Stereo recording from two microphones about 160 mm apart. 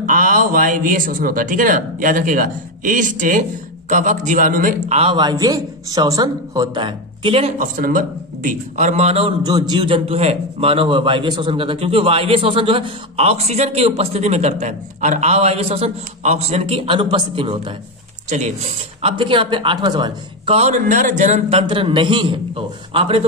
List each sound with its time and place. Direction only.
0.0 s a man's voice: 60° right (ahead or behind)
4.9 s a man's voice: 35° right (ahead or behind)
9.4 s a man's voice: 25° right (ahead or behind)
18.9 s a man's voice: 35° right (ahead or behind)
20.5 s a man's voice: 50° right (ahead or behind)